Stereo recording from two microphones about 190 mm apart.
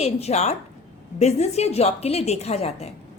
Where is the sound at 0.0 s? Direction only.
35° left (ahead or behind).